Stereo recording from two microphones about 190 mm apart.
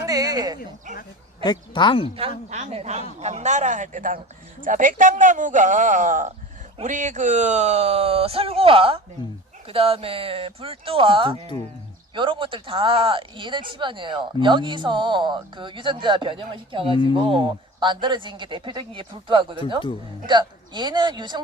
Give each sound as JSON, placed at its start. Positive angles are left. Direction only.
{"t": 0.0, "sound": "a sound", "side_deg": -20}
{"t": 1.5, "sound": "speech", "side_deg": 25}
{"t": 2.5, "sound": "speech", "side_deg": -35}